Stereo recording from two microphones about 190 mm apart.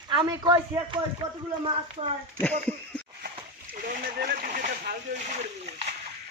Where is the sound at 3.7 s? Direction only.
50° right (ahead or behind).